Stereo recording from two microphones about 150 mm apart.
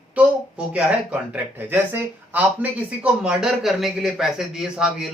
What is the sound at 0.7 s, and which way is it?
A man's voice, 10° right (ahead or behind).